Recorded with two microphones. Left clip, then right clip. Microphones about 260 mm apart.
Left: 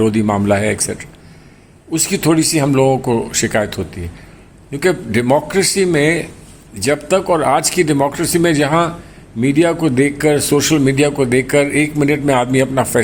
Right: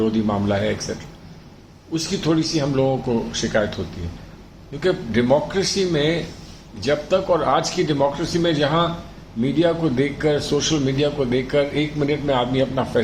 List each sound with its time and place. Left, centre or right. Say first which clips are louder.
0.0 s a man's voice: left 6 dB; left
4.8 s a man's voice: left 5 dB; left